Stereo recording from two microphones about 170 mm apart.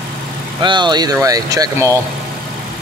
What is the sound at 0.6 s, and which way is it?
Speech, 25° right (ahead or behind).